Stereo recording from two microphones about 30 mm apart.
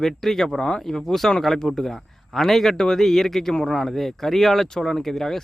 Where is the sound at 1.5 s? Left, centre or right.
Centre.